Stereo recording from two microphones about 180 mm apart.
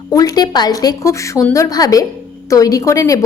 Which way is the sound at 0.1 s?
20° left (ahead or behind).